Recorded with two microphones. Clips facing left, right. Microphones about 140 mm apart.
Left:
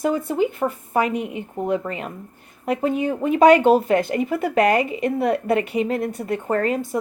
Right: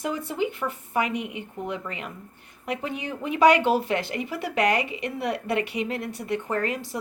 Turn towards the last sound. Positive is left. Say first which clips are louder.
# left 7 dB
turn(degrees=45)  # may be behind; listen again after turning